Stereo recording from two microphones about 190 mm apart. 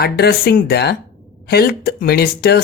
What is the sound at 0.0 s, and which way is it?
Speech, 55° left (ahead or behind).